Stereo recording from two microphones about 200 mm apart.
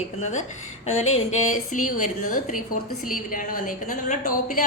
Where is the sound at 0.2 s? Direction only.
35° left (ahead or behind).